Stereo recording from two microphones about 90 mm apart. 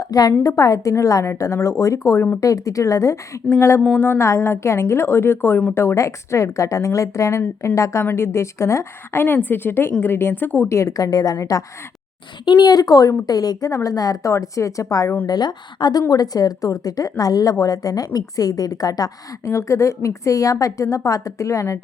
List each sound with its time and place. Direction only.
0.0 s a woman's voice: 45° left (ahead or behind); by 2.4 s 30° left (ahead or behind)
2.4 s a woman's voice: 40° left (ahead or behind)
12.5 s a woman's voice: 50° left (ahead or behind)
15.3 s a woman's voice: 50° left (ahead or behind); by 21.8 s 35° left (ahead or behind)